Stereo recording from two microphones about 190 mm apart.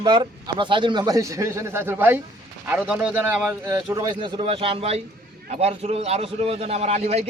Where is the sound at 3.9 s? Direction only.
20° right (ahead or behind).